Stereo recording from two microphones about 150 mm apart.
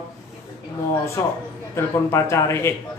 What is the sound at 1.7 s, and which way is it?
A man's voice, 20° left (ahead or behind).